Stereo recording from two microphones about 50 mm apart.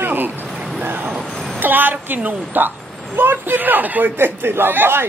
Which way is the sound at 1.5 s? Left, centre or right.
Right.